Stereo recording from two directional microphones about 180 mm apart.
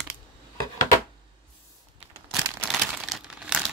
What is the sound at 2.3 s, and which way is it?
Crumpling, centre (ahead or behind).